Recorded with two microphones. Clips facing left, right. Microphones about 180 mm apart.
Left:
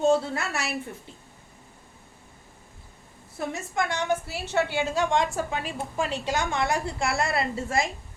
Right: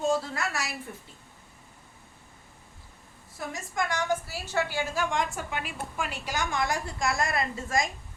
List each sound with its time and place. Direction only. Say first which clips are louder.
0.1 s a woman's voice: left 5 dB; 25° left (ahead or behind)
3.5 s a woman's voice: left 1 dB; 25° left (ahead or behind)